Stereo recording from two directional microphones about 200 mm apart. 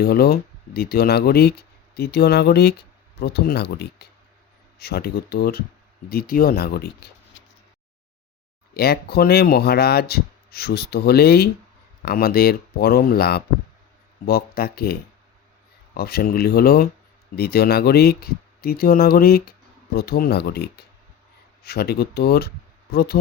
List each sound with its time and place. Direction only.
0.0 s speech: 50° left (ahead or behind)
8.7 s speech: 50° left (ahead or behind)
16.0 s speech: 50° left (ahead or behind)